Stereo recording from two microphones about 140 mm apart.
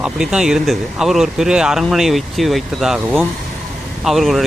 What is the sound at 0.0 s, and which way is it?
Speech, 5° right (ahead or behind).